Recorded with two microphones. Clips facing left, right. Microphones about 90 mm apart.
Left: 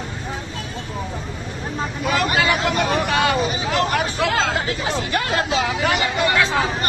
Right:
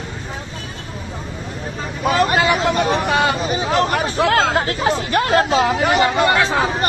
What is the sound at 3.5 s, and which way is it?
Speech, 35° right (ahead or behind).